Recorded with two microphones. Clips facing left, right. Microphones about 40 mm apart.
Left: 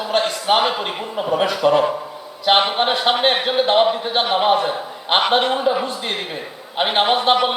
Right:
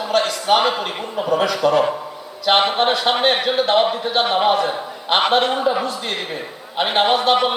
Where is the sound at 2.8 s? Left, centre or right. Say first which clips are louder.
Even; left.